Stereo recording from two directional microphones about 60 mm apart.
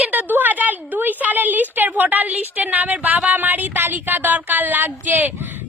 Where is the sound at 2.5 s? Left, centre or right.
Right.